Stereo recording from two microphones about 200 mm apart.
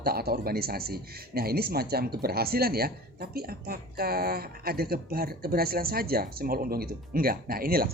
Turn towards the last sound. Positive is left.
turn(degrees=-45)  # may be behind; listen again after turning